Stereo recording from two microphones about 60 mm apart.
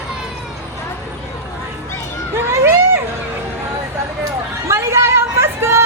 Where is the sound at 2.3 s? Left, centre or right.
Right.